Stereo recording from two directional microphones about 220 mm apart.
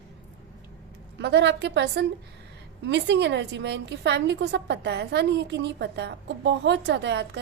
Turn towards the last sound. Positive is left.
turn(degrees=-50)  # may be behind; listen again after turning